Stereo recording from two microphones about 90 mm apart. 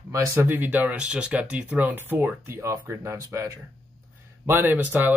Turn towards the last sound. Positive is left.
turn(degrees=-20)  # may be behind; listen again after turning